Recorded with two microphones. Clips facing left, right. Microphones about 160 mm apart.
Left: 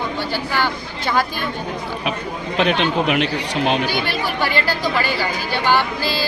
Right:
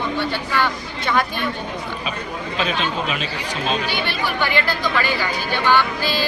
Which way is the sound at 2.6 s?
70° left (ahead or behind).